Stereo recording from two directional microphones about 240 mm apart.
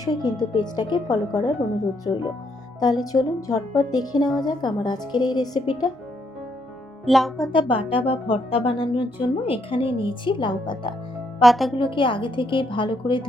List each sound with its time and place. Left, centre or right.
0.0 s speech: centre
2.8 s speech: centre
7.0 s speech: centre
7.5 s speech: left
11.3 s speech: centre
11.8 s speech: left